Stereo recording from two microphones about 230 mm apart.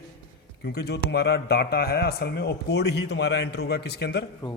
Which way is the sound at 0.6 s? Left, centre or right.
Left.